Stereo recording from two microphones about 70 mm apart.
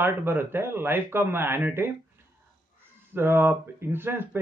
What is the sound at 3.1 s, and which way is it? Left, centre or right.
A man's voice, right.